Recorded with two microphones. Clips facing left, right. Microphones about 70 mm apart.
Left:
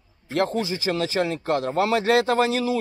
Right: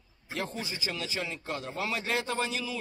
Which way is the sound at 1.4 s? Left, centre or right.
Left.